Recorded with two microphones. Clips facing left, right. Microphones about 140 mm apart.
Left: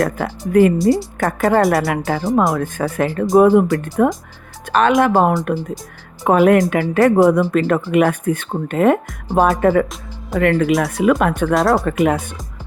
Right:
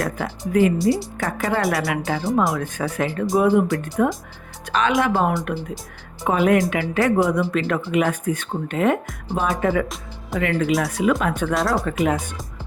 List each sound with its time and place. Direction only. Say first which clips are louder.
0.0 s speech: left 5 dB; 50° left (ahead or behind)